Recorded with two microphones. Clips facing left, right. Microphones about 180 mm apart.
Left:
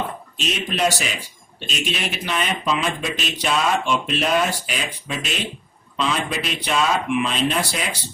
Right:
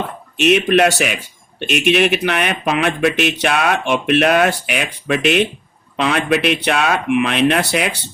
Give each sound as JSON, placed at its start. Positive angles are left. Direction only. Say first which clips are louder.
{"t": 0.3, "sound": "speech", "louder": "right 12 dB", "side_deg": -65}